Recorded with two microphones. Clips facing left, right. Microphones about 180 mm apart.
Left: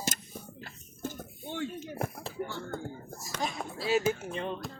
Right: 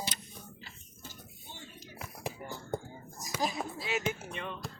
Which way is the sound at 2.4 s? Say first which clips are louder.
Left 6 dB; 70° left (ahead or behind).